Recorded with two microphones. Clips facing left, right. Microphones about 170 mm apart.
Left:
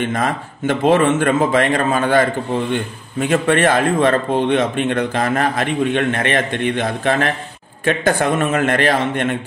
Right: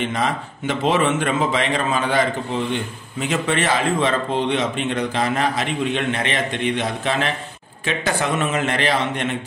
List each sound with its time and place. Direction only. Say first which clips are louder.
0.0 s speech: left 3 dB; 50° left (ahead or behind)